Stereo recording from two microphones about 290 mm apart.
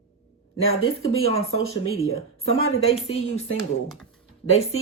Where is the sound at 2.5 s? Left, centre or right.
Left.